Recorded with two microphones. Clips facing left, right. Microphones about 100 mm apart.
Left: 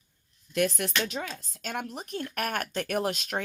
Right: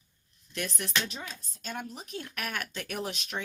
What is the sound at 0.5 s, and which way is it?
Speech, 60° left (ahead or behind).